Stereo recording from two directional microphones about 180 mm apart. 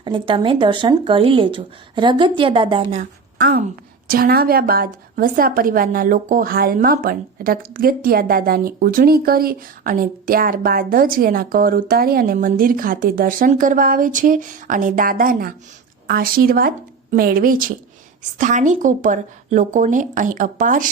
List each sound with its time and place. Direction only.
0.0 s speech: 25° right (ahead or behind)
3.3 s a woman's voice: 55° right (ahead or behind)